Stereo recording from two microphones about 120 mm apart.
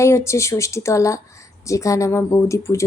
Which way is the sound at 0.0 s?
25° left (ahead or behind).